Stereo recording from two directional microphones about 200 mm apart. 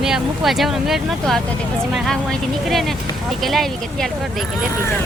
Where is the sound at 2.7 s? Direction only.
Centre (ahead or behind).